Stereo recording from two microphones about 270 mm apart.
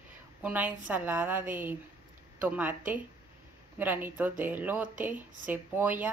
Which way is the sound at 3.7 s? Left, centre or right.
Centre.